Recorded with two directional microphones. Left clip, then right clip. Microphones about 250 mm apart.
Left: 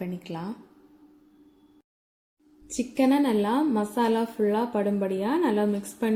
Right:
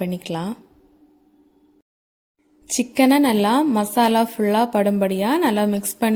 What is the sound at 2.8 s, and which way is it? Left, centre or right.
A woman's voice, right.